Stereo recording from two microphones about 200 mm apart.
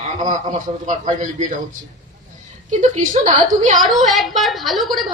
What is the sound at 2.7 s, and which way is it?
A woman's voice, 40° right (ahead or behind).